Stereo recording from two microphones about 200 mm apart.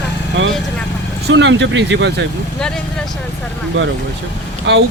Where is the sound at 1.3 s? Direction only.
65° right (ahead or behind).